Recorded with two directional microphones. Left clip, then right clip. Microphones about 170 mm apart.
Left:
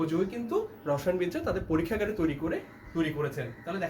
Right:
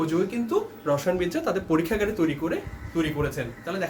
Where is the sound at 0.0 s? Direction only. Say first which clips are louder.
Right 4 dB; 15° right (ahead or behind).